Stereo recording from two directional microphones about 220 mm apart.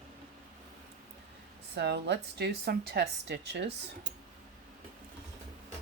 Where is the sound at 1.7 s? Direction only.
50° right (ahead or behind).